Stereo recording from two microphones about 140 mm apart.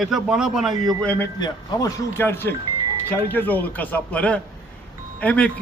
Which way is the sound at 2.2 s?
15° left (ahead or behind).